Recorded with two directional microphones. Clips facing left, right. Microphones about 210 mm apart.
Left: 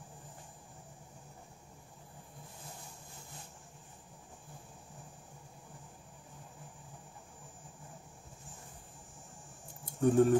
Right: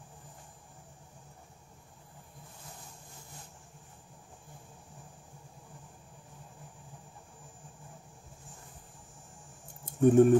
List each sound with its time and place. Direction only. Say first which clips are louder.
9.8 s speech: right 5 dB; 20° right (ahead or behind)